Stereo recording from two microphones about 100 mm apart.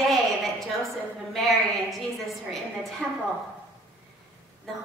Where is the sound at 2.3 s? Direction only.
Centre (ahead or behind).